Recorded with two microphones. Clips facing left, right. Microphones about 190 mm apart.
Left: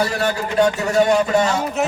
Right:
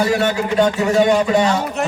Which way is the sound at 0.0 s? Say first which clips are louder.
Right 3 dB; 40° left (ahead or behind).